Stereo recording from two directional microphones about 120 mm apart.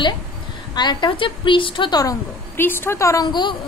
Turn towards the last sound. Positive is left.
turn(degrees=40)  # may be behind; listen again after turning